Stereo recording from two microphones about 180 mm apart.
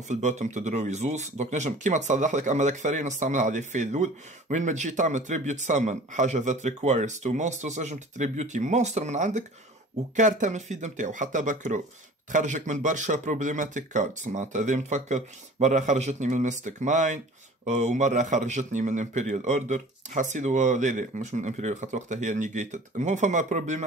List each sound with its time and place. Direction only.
0.1 s speech: 40° right (ahead or behind)